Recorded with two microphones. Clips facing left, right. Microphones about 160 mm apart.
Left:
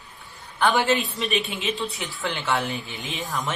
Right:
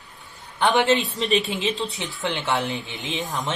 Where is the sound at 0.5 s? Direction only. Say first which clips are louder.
Right 2 dB; 20° right (ahead or behind).